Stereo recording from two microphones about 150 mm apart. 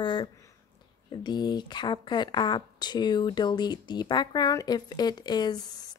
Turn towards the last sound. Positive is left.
turn(degrees=25)  # may be behind; listen again after turning